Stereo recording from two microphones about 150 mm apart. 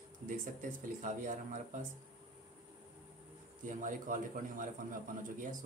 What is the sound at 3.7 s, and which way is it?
A man's voice, 60° right (ahead or behind).